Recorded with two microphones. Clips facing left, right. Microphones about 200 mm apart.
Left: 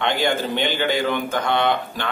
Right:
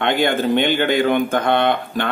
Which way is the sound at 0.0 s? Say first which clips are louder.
Right 4 dB; 55° right (ahead or behind).